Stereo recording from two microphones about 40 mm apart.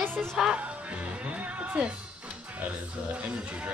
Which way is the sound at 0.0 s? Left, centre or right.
Right.